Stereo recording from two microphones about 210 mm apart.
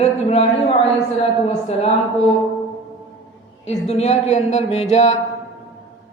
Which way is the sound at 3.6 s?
30° left (ahead or behind).